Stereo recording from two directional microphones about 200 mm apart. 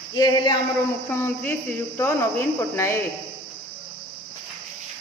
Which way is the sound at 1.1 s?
10° left (ahead or behind).